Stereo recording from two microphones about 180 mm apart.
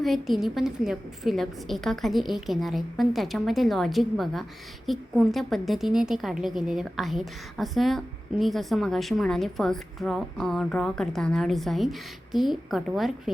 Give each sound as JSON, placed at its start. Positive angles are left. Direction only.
{"t": 0.0, "sound": "a woman's voice", "side_deg": 0}